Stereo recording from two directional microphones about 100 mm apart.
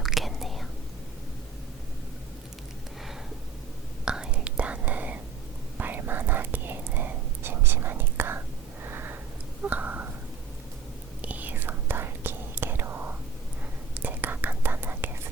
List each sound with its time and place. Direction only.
0.0 s whispering: centre (ahead or behind)
4.0 s whispering: 10° right (ahead or behind)
8.8 s sniff: 20° right (ahead or behind)
9.6 s a sound: 15° right (ahead or behind)
11.2 s whispering: 15° right (ahead or behind)